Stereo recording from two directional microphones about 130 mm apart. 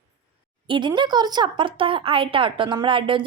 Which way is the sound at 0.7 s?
35° right (ahead or behind).